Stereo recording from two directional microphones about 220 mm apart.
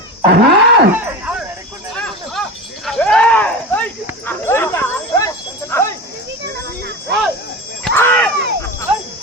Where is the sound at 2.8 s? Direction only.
5° left (ahead or behind).